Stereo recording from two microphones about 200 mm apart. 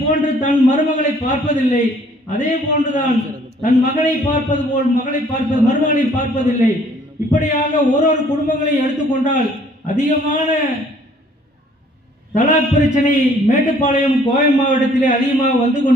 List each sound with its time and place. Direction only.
0.1 s a man's voice: 35° left (ahead or behind)
12.4 s a man's voice: 35° left (ahead or behind)